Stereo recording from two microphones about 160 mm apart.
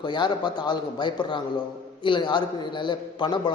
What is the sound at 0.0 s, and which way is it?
A man's voice, 30° left (ahead or behind).